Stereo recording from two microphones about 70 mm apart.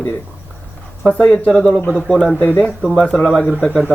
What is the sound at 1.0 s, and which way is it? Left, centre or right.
Speech, centre.